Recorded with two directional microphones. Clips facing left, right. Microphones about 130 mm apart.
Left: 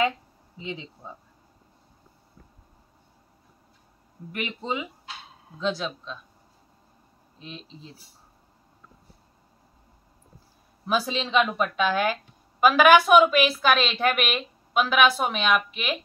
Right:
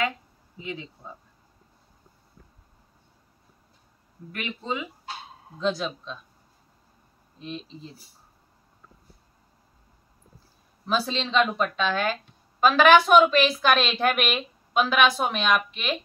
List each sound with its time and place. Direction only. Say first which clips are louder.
0.6 s speech: even; 20° left (ahead or behind)
4.3 s speech: left 1 dB; 20° left (ahead or behind)
5.6 s speech: right 1 dB; centre (ahead or behind)
7.3 s speech: right 5 dB; centre (ahead or behind)
10.9 s speech: left 1 dB; 10° left (ahead or behind)